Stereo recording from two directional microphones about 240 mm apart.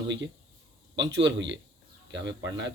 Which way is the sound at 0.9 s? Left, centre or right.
Right.